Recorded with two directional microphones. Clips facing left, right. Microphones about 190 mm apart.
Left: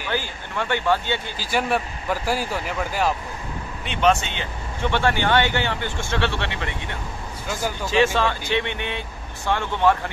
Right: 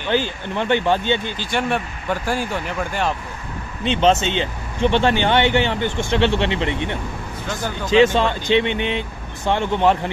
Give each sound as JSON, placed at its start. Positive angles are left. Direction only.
{"t": 0.1, "sound": "speech", "side_deg": -20}
{"t": 1.4, "sound": "speech", "side_deg": 5}
{"t": 3.8, "sound": "speech", "side_deg": -25}